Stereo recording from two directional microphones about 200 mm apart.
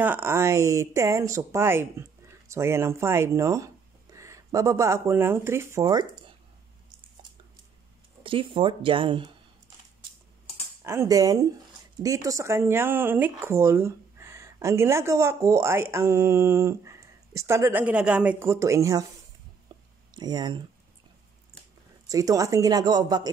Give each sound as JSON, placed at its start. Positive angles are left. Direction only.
{"t": 0.0, "sound": "speech", "side_deg": -10}
{"t": 8.2, "sound": "speech", "side_deg": -25}
{"t": 10.8, "sound": "speech", "side_deg": -15}
{"t": 19.7, "sound": "a sound", "side_deg": -25}
{"t": 20.2, "sound": "speech", "side_deg": -20}
{"t": 22.0, "sound": "speech", "side_deg": -15}